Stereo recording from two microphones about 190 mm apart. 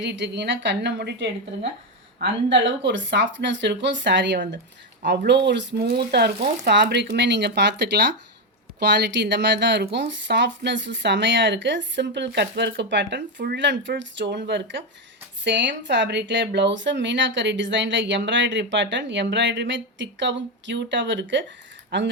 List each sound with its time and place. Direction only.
0.0 s speech: 70° right (ahead or behind)
8.8 s speech: 65° right (ahead or behind)